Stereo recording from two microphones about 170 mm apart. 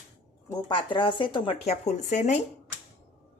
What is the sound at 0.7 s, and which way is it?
Speech, 30° left (ahead or behind).